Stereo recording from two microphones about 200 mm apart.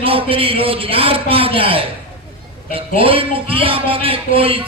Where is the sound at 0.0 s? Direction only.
25° right (ahead or behind).